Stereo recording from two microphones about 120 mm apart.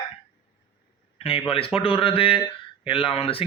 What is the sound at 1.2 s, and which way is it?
A man's voice, 50° left (ahead or behind).